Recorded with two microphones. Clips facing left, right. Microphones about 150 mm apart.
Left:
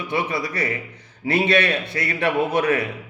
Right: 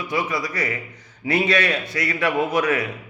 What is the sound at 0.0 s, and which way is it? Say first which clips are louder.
A man's voice: even; 30° left (ahead or behind).